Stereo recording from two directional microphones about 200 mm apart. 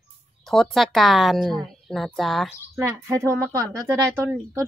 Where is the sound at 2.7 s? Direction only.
15° right (ahead or behind).